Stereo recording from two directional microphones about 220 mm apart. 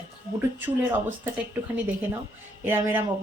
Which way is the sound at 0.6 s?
10° right (ahead or behind).